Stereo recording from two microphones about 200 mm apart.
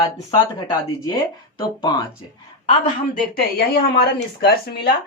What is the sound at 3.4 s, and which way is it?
Speech, 50° left (ahead or behind).